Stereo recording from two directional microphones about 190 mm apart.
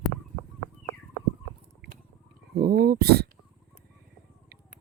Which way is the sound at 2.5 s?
55° right (ahead or behind).